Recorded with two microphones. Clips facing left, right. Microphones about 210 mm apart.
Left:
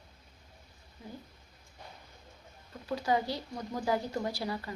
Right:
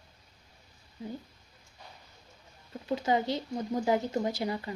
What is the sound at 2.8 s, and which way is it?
Speech, 20° right (ahead or behind).